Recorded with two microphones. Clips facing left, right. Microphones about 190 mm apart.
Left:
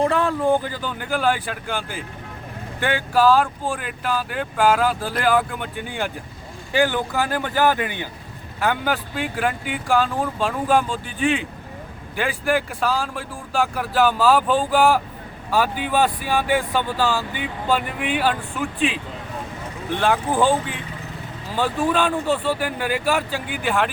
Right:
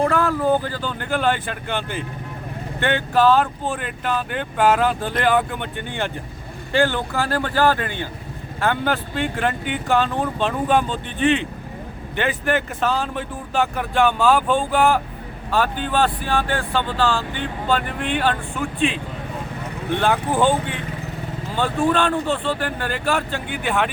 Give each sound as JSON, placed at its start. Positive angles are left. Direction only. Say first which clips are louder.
{"t": 0.0, "sound": "speech", "louder": "even", "side_deg": 15}
{"t": 20.0, "sound": "speech", "louder": "even", "side_deg": 0}